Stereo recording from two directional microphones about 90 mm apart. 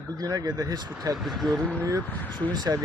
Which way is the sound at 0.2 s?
45° right (ahead or behind).